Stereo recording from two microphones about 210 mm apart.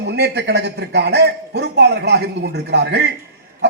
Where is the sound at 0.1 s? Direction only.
50° right (ahead or behind).